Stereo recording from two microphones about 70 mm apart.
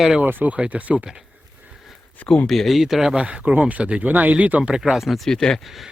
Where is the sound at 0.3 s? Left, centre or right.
Right.